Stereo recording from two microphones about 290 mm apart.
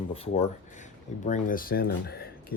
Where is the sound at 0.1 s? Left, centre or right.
Centre.